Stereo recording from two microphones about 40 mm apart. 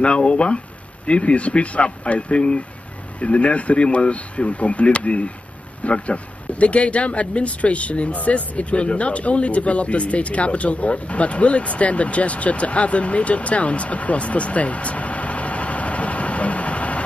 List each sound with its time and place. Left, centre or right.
0.0 s speech: left